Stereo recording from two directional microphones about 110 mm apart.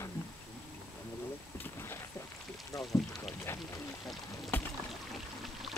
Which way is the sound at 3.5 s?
20° left (ahead or behind).